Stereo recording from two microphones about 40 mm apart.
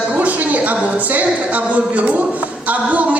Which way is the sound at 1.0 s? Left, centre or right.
Right.